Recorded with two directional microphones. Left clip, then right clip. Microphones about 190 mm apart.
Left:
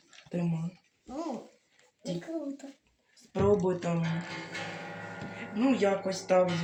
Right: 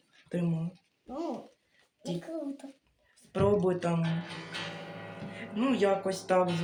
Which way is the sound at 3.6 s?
40° right (ahead or behind).